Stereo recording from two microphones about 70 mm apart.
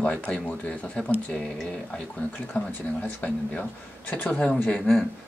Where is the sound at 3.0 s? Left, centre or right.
Left.